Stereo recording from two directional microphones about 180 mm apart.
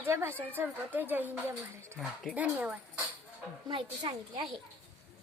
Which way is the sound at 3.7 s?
25° right (ahead or behind).